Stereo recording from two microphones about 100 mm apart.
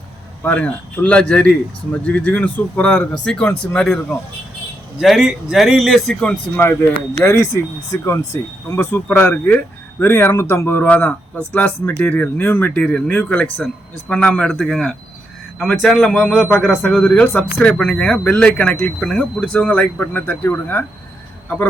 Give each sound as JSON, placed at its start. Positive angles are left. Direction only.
{"t": 0.4, "sound": "speech", "side_deg": 15}
{"t": 4.9, "sound": "speech", "side_deg": -5}
{"t": 6.2, "sound": "speech", "side_deg": 20}
{"t": 7.3, "sound": "a man's voice", "side_deg": 30}